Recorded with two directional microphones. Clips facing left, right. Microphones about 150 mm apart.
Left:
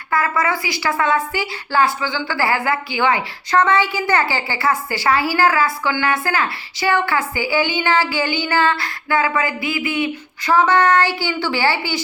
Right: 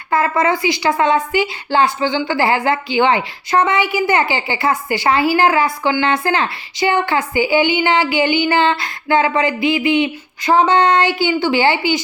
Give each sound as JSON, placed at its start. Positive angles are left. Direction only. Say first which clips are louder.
{"t": 0.1, "sound": "a woman's voice", "louder": "right 4 dB", "side_deg": -20}